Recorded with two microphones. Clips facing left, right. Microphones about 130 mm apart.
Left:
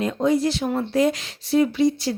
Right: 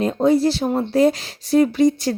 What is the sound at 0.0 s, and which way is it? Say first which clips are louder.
A woman's voice: right 4 dB; 35° right (ahead or behind).